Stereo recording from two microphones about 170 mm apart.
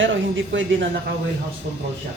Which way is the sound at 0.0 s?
90° right.